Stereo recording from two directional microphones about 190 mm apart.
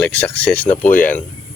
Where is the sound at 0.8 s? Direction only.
45° left (ahead or behind).